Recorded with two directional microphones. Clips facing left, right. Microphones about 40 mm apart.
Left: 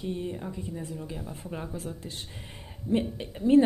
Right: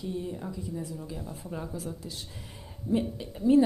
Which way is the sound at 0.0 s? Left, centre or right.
Left.